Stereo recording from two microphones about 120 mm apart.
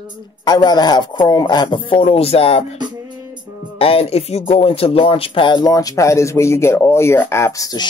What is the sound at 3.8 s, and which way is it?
Speech, 55° left (ahead or behind).